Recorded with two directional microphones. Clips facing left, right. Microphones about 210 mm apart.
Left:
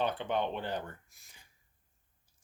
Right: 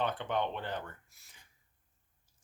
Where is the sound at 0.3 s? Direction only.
10° left (ahead or behind).